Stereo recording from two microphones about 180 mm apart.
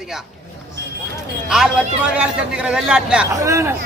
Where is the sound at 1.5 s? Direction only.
Centre (ahead or behind).